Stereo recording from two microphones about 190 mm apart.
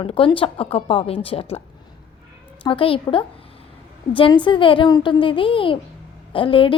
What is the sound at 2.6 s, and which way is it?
A woman's voice, 25° left (ahead or behind).